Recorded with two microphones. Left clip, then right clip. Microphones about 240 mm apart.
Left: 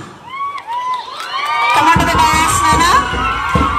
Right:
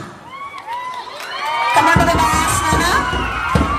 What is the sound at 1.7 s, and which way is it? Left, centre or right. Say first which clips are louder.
Music: left 1 dB; centre.